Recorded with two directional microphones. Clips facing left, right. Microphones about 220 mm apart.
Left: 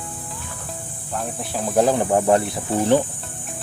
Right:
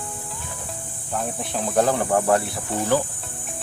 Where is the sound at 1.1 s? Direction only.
Centre (ahead or behind).